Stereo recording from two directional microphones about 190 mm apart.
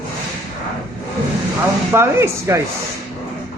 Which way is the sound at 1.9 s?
15° right (ahead or behind).